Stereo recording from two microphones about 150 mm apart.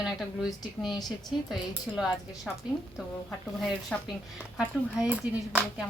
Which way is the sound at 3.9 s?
5° left (ahead or behind).